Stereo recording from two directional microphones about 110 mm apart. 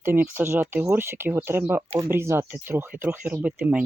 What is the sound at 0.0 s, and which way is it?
Speech, 20° right (ahead or behind).